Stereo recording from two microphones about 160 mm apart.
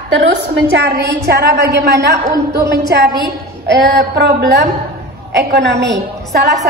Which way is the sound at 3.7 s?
90° right.